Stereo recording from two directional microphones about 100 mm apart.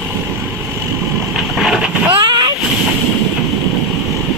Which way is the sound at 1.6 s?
5° right (ahead or behind).